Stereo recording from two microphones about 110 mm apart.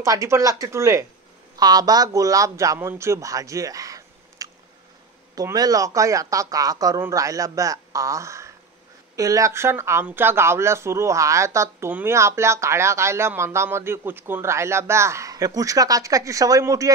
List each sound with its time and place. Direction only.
0.0 s speech: 30° right (ahead or behind)